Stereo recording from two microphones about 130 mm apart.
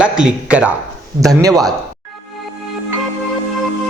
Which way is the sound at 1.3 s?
25° right (ahead or behind).